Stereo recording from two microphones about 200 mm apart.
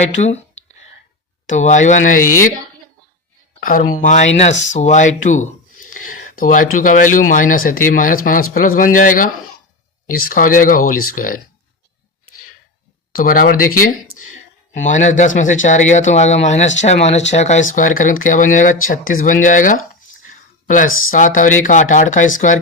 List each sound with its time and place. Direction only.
0.2 s speech: 35° left (ahead or behind)
1.5 s speech: 35° left (ahead or behind)
3.7 s speech: 45° left (ahead or behind)
5.8 s a sound: 45° left (ahead or behind)
6.7 s speech: 40° left (ahead or behind)
10.8 s speech: 90° left
11.1 s speech: 45° left (ahead or behind)
13.1 s speech: 45° left (ahead or behind)
14.7 s speech: 40° left (ahead or behind)